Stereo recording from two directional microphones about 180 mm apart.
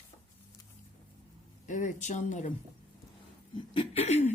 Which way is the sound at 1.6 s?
45° left (ahead or behind).